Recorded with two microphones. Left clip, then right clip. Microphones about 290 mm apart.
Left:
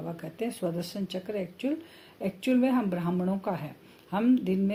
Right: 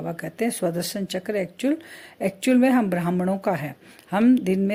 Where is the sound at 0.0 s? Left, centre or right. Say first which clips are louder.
Right 8 dB; right.